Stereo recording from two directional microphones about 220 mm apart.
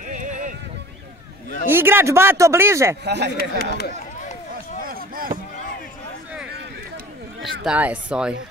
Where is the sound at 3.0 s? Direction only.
50° right (ahead or behind).